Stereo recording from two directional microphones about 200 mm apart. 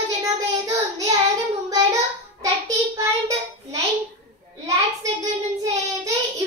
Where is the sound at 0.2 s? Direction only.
15° right (ahead or behind).